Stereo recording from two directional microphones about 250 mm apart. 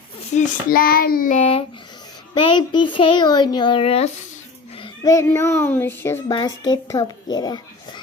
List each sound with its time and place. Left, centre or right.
0.3 s child singing: left
2.3 s a child's voice: centre